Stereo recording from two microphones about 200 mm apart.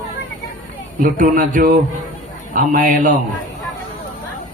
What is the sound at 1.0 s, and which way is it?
A man's voice, 40° right (ahead or behind).